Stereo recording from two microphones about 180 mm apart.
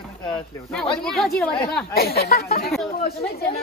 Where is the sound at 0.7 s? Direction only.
Centre (ahead or behind).